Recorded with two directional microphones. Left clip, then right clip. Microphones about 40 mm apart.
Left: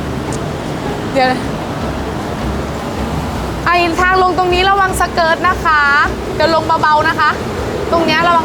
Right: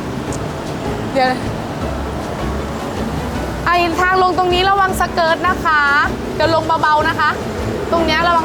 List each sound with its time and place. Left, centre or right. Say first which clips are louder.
1.1 s speech: left 2 dB; centre
3.7 s speech: left 2 dB; right